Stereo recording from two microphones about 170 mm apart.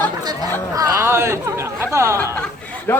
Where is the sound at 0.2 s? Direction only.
20° right (ahead or behind).